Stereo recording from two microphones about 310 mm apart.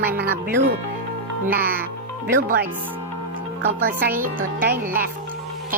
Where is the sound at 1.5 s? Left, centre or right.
Right.